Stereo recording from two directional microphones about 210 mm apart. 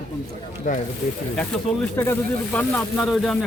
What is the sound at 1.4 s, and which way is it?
Speech, 10° left (ahead or behind).